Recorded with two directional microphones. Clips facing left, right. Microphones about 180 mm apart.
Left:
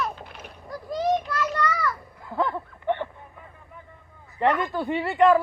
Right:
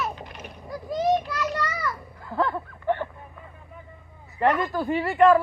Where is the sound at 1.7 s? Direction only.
15° right (ahead or behind).